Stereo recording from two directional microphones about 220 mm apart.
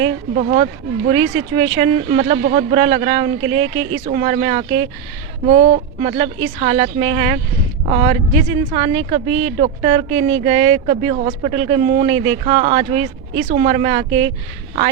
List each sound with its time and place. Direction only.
0.0 s speech: 35° right (ahead or behind)